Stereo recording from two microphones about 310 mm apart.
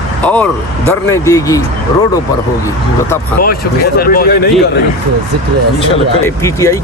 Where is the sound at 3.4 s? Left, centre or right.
Left.